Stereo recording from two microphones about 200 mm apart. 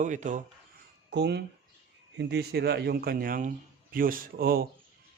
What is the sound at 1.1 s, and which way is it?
A man's voice, 55° right (ahead or behind).